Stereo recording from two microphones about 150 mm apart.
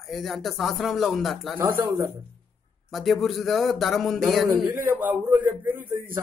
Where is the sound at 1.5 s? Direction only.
15° right (ahead or behind).